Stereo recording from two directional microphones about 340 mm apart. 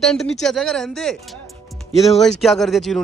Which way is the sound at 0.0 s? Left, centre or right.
Centre.